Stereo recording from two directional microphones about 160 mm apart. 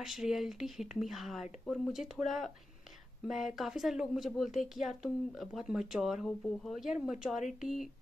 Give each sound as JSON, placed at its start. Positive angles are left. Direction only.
{"t": 0.0, "sound": "a woman's voice", "side_deg": 0}